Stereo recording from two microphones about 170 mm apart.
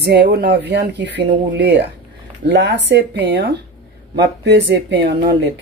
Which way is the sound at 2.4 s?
90° right.